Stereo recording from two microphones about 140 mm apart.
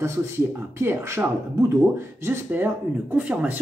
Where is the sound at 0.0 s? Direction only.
20° right (ahead or behind).